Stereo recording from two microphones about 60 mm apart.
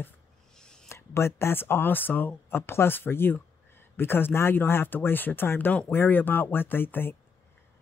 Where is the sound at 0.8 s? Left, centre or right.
Left.